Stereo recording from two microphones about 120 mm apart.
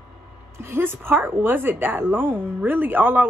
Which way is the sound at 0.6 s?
20° right (ahead or behind).